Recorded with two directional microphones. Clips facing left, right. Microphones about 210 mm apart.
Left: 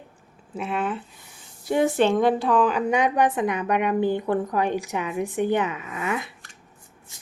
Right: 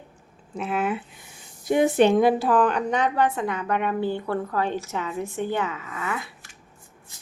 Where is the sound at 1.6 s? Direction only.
15° right (ahead or behind); by 6.3 s 20° left (ahead or behind).